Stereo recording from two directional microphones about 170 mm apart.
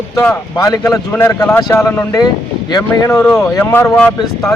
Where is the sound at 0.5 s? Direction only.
20° left (ahead or behind); by 4.1 s 5° left (ahead or behind).